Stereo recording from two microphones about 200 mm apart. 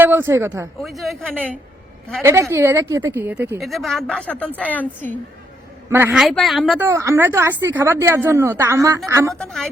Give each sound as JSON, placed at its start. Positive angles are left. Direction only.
{"t": 0.0, "sound": "speech", "side_deg": -10}
{"t": 0.8, "sound": "speech", "side_deg": 0}
{"t": 2.2, "sound": "speech", "side_deg": -15}
{"t": 3.6, "sound": "a woman's voice", "side_deg": 0}
{"t": 5.9, "sound": "speech", "side_deg": -10}
{"t": 6.7, "sound": "speech", "side_deg": -10}
{"t": 9.3, "sound": "speech", "side_deg": 5}